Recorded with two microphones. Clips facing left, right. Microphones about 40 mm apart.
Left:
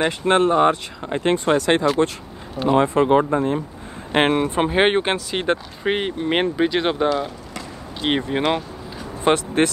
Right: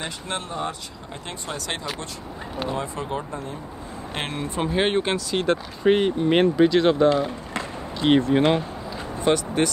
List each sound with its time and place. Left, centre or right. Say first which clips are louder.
0.0 s speech: left 13 dB; left
1.9 s speech: left 13 dB; centre
2.7 s speech: left 16 dB; left
9.2 s speech: left 3 dB; left